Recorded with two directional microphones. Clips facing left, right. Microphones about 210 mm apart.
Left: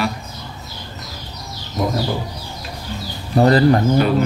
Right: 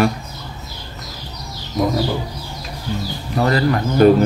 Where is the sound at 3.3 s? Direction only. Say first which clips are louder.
Left 5 dB; 35° left (ahead or behind).